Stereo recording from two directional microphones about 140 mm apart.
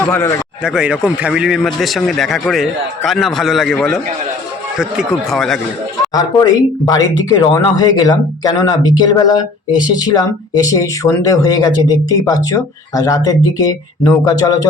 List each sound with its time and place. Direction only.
0.0 s a man's voice: 15° left (ahead or behind)
0.6 s a man's voice: 5° right (ahead or behind)
6.1 s speech: 25° left (ahead or behind)